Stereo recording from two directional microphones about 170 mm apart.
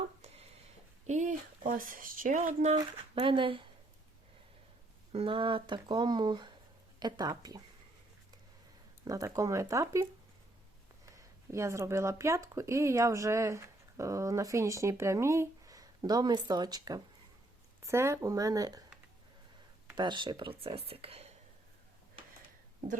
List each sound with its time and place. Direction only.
0.2 s a sound: 40° right (ahead or behind)
1.0 s speech: 45° right (ahead or behind)
3.2 s speech: 30° right (ahead or behind)
5.1 s speech: 30° right (ahead or behind)
9.0 s speech: 20° right (ahead or behind)
20.0 s speech: 25° right (ahead or behind)